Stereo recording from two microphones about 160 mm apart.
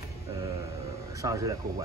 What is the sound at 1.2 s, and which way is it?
Speech, 20° right (ahead or behind).